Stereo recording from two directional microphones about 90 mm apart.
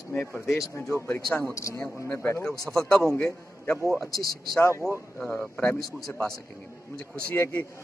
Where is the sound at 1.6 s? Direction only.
35° left (ahead or behind).